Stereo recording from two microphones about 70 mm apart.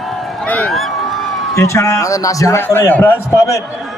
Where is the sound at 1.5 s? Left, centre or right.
Left.